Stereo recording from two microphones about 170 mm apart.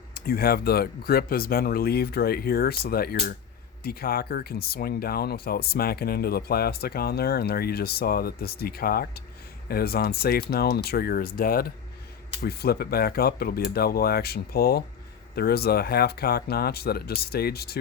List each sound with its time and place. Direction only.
0.1 s speech: 65° left (ahead or behind)